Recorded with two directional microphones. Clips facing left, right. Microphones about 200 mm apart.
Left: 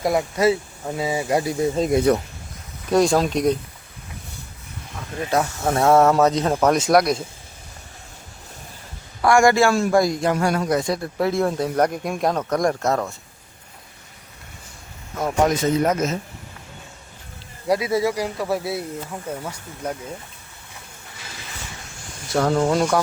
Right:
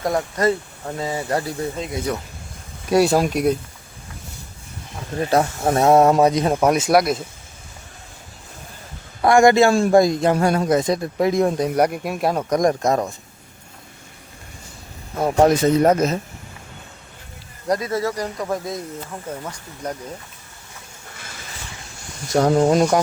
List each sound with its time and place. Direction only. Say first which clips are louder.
0.0 s speech: left 1 dB; 10° left (ahead or behind)
2.1 s speech: left 6 dB; 55° left (ahead or behind)
2.9 s speech: right 1 dB; 10° right (ahead or behind)
5.2 s speech: right 3 dB; 35° right (ahead or behind); by 7.3 s centre (ahead or behind)
9.2 s a man's voice: right 3 dB; 20° right (ahead or behind)
15.1 s speech: right 4 dB; 30° right (ahead or behind)
17.7 s speech: left 2 dB; 10° left (ahead or behind)
22.4 s a man's voice: right 3 dB; 20° right (ahead or behind)